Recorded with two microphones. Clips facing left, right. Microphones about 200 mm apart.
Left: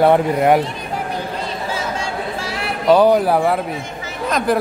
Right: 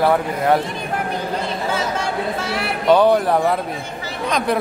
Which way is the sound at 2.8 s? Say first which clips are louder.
Left 2 dB; 10° left (ahead or behind).